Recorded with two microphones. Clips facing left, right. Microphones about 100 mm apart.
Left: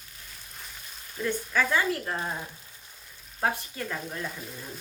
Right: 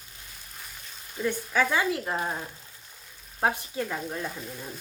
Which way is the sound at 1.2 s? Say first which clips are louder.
Right 2 dB; 15° right (ahead or behind).